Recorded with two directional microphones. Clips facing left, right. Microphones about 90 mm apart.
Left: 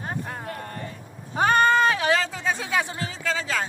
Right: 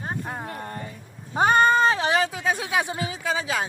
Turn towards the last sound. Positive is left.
turn(degrees=-15)  # may be behind; listen again after turning